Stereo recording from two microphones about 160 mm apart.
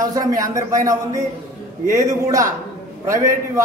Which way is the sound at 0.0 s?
25° right (ahead or behind).